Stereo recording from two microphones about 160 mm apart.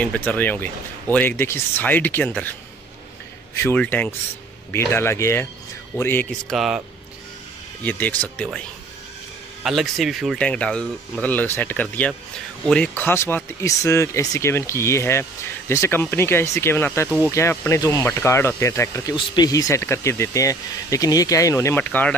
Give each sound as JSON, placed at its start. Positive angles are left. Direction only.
{"t": 0.0, "sound": "speech", "side_deg": 10}
{"t": 3.5, "sound": "speech", "side_deg": 10}
{"t": 6.5, "sound": "speech", "side_deg": 0}
{"t": 7.8, "sound": "speech", "side_deg": 10}
{"t": 9.6, "sound": "speech", "side_deg": 0}